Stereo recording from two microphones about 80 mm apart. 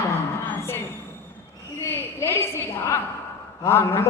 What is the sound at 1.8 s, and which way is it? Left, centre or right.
Speech, left.